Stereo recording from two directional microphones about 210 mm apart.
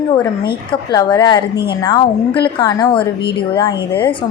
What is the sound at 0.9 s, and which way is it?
A woman's voice, 20° left (ahead or behind).